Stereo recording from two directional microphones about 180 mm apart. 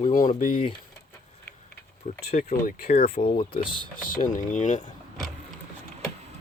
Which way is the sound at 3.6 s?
30° left (ahead or behind).